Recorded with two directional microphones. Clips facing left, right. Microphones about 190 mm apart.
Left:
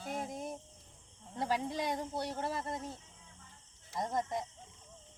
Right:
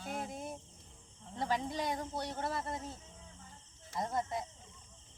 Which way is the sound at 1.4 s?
10° left (ahead or behind).